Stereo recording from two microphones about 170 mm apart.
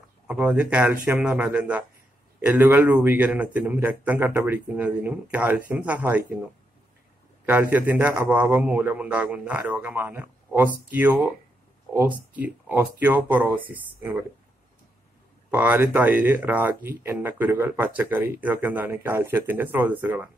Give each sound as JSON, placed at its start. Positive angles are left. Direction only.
{"t": 0.3, "sound": "speech", "side_deg": -5}
{"t": 7.4, "sound": "speech", "side_deg": -10}
{"t": 15.5, "sound": "speech", "side_deg": -10}